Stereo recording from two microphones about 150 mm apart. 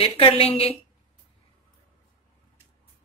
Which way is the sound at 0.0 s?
40° left (ahead or behind).